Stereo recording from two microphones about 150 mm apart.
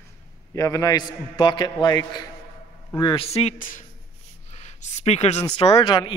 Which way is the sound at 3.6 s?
65° left (ahead or behind).